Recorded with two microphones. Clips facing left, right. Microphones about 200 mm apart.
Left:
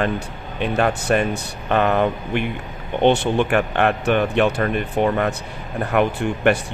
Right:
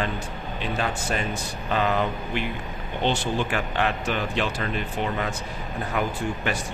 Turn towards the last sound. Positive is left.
turn(degrees=65)  # may be behind; listen again after turning